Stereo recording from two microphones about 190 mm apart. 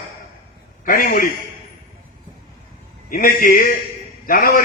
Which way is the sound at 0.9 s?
50° left (ahead or behind).